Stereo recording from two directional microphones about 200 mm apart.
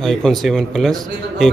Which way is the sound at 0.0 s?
Centre (ahead or behind).